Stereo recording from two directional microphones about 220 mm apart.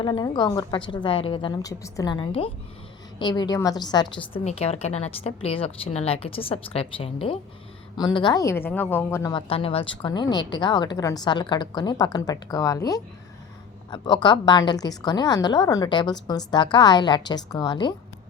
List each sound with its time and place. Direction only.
0.0 s a woman's voice: 20° left (ahead or behind)